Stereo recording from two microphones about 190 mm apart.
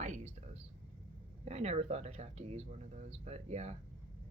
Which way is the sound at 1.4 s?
35° right (ahead or behind).